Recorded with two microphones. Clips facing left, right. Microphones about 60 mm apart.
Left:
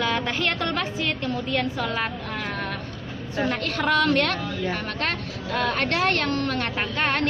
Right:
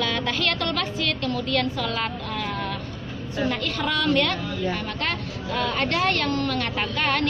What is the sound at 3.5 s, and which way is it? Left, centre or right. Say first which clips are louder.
A woman's voice: left 4 dB; left.